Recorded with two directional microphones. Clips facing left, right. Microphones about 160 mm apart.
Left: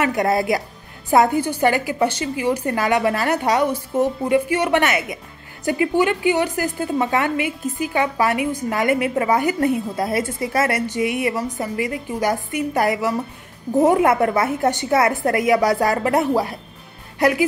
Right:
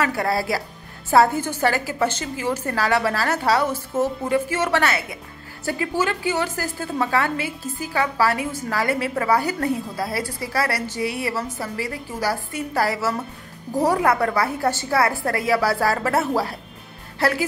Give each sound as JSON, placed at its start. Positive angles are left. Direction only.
{"t": 0.0, "sound": "a woman's voice", "side_deg": 20}